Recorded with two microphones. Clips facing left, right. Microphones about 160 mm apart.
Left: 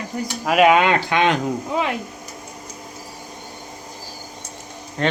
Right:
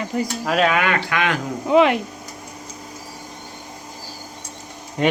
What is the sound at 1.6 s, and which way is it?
Speech, 75° right (ahead or behind).